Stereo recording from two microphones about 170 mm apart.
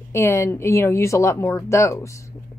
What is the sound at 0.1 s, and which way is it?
A woman's voice, 15° left (ahead or behind).